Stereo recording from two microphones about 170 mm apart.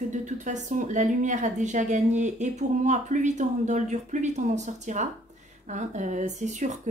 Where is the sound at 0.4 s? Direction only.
45° right (ahead or behind).